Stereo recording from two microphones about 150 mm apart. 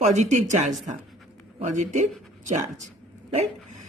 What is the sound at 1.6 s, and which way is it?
Speech, 55° right (ahead or behind).